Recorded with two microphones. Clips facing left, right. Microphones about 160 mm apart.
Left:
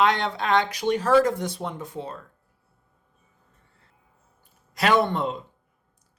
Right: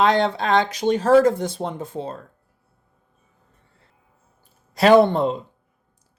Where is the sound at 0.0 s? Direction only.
30° right (ahead or behind).